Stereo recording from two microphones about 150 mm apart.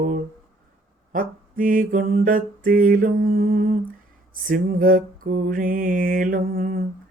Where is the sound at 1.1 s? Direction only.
65° right (ahead or behind).